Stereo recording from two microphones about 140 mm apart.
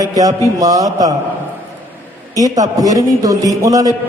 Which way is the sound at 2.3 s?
25° right (ahead or behind).